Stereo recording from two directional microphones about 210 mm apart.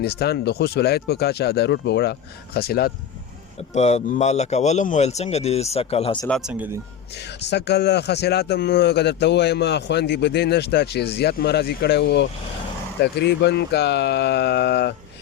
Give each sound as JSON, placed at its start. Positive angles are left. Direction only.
{"t": 0.0, "sound": "a man's voice", "side_deg": 50}
{"t": 3.8, "sound": "speech", "side_deg": 30}
{"t": 6.2, "sound": "speech", "side_deg": 0}
{"t": 7.4, "sound": "a man's voice", "side_deg": 55}